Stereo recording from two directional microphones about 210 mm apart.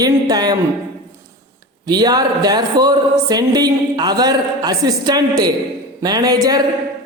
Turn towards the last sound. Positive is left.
turn(degrees=-20)  # may be behind; listen again after turning